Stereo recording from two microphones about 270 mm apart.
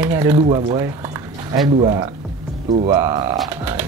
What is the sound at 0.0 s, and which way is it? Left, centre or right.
Speech, centre.